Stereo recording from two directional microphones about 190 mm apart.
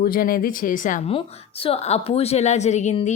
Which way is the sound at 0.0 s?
50° left (ahead or behind).